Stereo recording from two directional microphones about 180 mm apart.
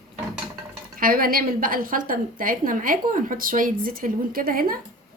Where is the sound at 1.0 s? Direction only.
55° right (ahead or behind).